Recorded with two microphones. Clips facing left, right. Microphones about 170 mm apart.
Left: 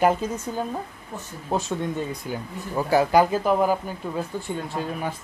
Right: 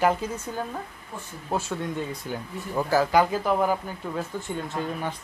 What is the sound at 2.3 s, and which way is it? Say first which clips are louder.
Speech: left 1 dB; 10° left (ahead or behind).